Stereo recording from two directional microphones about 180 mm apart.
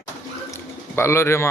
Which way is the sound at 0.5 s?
15° left (ahead or behind).